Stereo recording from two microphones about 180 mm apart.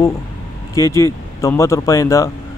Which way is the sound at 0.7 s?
15° left (ahead or behind).